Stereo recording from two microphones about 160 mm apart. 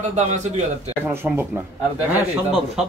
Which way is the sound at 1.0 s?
15° right (ahead or behind).